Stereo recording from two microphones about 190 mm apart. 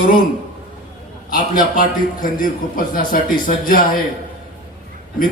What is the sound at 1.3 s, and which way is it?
A man's voice, 45° left (ahead or behind).